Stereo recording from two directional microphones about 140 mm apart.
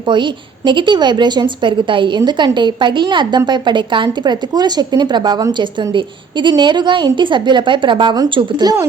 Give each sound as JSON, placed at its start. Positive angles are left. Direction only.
{"t": 0.1, "sound": "a woman's voice", "side_deg": -35}